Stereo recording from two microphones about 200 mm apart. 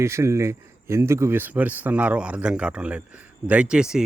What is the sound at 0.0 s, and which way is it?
Speech, 15° right (ahead or behind).